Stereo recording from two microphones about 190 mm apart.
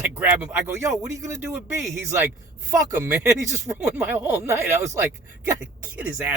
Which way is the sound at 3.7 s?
10° right (ahead or behind).